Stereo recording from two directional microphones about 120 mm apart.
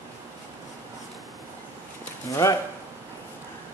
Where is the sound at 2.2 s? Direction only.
25° left (ahead or behind).